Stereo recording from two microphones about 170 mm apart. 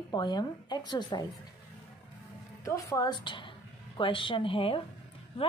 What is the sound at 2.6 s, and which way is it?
A woman's voice, 20° left (ahead or behind).